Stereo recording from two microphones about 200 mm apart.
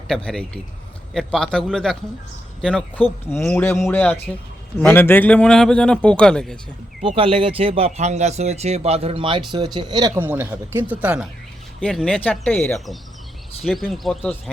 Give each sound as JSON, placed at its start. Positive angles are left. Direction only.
{"t": 0.1, "sound": "a man's voice", "side_deg": 5}
{"t": 7.2, "sound": "speech", "side_deg": -30}
{"t": 10.2, "sound": "speech", "side_deg": -10}
{"t": 11.8, "sound": "a man's voice", "side_deg": 5}